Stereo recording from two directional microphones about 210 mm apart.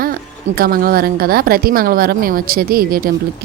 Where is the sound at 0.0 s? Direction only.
45° right (ahead or behind).